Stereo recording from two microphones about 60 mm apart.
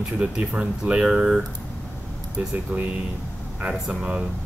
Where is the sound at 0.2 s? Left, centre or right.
Right.